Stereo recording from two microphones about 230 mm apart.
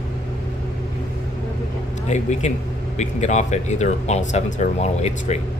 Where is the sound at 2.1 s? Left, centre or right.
Left.